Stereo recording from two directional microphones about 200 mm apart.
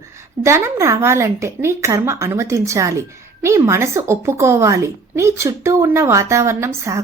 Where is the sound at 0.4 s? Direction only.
15° right (ahead or behind).